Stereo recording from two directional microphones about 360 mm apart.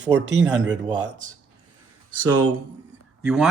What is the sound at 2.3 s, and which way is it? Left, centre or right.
Speech, right.